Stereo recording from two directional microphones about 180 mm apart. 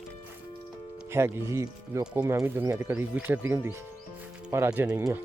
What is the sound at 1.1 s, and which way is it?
Speech, 15° right (ahead or behind).